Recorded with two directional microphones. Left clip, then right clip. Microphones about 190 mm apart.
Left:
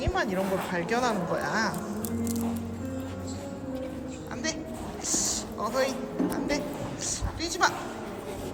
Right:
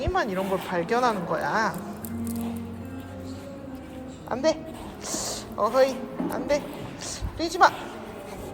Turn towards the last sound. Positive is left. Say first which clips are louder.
# right 6 dB
turn(degrees=0)  # may be behind; listen again after turning